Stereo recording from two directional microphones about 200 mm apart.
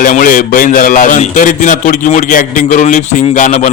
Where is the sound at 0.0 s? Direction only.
45° left (ahead or behind).